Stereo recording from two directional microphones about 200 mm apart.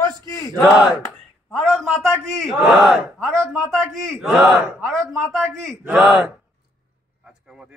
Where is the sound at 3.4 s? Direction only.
15° right (ahead or behind).